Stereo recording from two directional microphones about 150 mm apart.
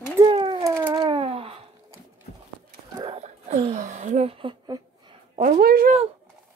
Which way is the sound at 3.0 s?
40° right (ahead or behind).